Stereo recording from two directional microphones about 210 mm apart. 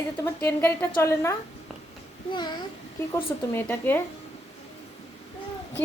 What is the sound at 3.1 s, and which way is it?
Speech, 10° left (ahead or behind).